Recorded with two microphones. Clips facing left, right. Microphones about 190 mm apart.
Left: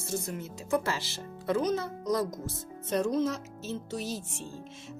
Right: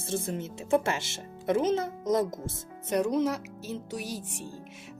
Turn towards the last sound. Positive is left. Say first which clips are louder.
# left 1 dB
turn(degrees=-15)  # may be behind; listen again after turning